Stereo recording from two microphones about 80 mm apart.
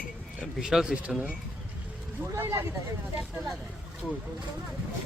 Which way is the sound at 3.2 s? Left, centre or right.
Centre.